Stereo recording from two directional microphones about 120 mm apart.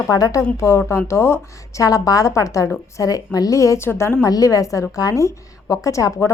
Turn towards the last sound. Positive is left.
turn(degrees=25)  # may be behind; listen again after turning